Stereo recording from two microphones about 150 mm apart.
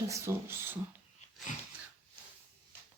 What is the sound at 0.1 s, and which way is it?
Speech, 15° right (ahead or behind).